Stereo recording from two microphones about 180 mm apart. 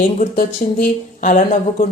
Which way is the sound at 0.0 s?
50° left (ahead or behind).